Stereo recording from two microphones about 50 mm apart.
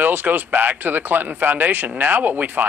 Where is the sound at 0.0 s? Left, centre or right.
Right.